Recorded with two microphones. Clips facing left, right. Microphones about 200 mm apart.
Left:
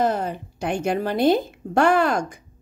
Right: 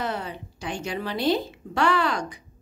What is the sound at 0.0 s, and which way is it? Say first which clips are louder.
A woman's voice: left 8 dB; 45° left (ahead or behind).